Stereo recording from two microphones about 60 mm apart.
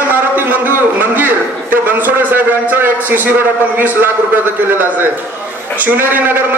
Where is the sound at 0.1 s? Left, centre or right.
Right.